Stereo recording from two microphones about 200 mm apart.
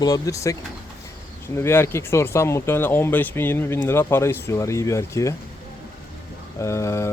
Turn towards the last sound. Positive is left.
turn(degrees=15)  # may be behind; listen again after turning